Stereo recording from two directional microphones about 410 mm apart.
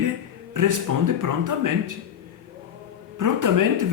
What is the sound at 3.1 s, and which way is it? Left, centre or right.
Speech, right.